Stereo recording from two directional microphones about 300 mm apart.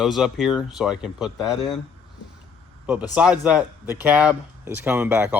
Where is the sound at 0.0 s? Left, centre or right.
Centre.